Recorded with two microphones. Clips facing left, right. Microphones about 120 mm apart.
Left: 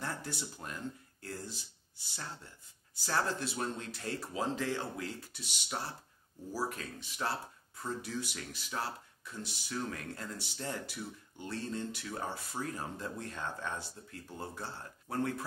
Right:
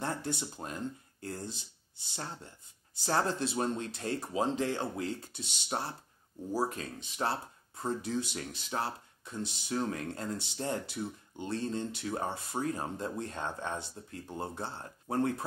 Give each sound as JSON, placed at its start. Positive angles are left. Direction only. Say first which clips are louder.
{"t": 0.0, "sound": "speech", "louder": "right 5 dB", "side_deg": -25}
{"t": 5.7, "sound": "speech", "louder": "right 4 dB", "side_deg": -35}
{"t": 6.5, "sound": "speech", "louder": "right 5 dB", "side_deg": -25}